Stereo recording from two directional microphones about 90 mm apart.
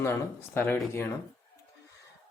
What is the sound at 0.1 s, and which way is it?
Speech, 25° left (ahead or behind).